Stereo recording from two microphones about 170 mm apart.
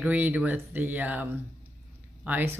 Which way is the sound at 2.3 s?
10° right (ahead or behind).